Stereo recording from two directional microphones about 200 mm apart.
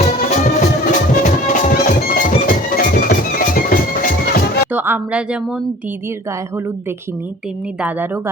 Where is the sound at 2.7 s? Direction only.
45° left (ahead or behind).